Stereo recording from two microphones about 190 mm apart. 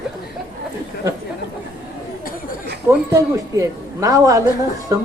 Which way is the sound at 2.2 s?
50° left (ahead or behind).